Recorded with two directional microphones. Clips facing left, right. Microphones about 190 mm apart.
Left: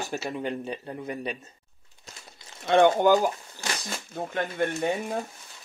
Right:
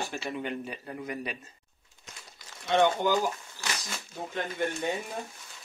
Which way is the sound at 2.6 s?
55° left (ahead or behind).